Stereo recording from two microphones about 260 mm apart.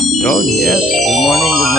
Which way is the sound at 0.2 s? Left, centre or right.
Centre.